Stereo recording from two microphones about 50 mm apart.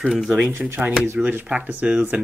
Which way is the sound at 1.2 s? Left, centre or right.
Right.